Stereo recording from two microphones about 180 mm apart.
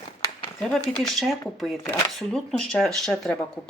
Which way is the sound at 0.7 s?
Centre (ahead or behind).